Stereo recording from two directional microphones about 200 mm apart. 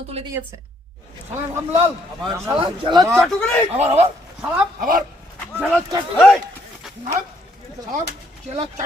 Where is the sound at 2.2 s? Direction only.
15° right (ahead or behind).